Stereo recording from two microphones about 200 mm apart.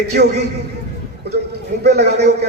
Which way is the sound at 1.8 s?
55° right (ahead or behind).